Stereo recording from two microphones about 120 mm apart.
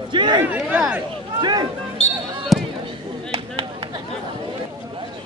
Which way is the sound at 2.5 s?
Centre (ahead or behind).